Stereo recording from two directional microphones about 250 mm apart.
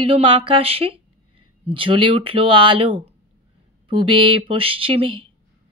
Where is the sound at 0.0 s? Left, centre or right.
Right.